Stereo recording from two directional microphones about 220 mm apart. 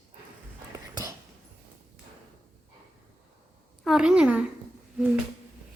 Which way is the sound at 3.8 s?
Centre (ahead or behind).